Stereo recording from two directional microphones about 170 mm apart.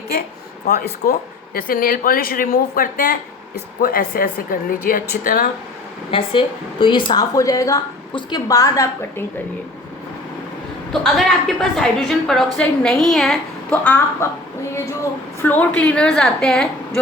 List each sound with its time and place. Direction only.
0.7 s speech: 70° left (ahead or behind)
1.5 s speech: 60° left (ahead or behind)
6.1 s a woman's voice: 30° left (ahead or behind); by 9.2 s 15° left (ahead or behind)
11.0 s a woman's voice: centre (ahead or behind)
15.4 s a woman's voice: 10° left (ahead or behind)